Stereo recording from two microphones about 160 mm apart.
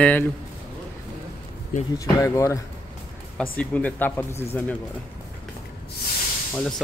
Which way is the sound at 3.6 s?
10° left (ahead or behind).